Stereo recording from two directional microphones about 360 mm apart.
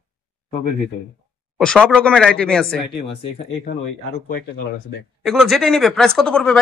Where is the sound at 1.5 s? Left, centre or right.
Centre.